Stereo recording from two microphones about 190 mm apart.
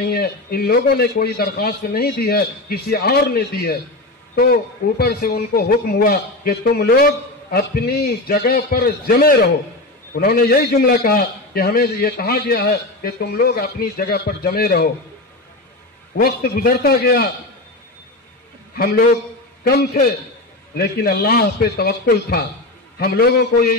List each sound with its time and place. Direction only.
0.0 s a man's voice: 55° left (ahead or behind)
16.2 s a man's voice: 55° left (ahead or behind)
18.8 s a man's voice: 50° left (ahead or behind)